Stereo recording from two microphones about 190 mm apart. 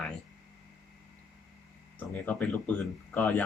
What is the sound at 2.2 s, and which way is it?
Speech, 5° left (ahead or behind).